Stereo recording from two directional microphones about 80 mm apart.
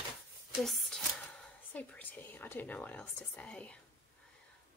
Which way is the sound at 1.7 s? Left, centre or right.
Centre.